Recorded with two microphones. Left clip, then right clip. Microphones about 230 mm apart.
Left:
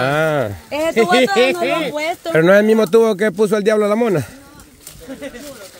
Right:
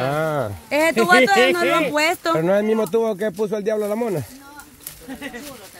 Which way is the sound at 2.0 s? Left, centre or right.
Right.